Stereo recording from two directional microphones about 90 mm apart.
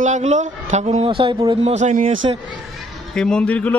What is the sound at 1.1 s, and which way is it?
Speech, 75° right (ahead or behind).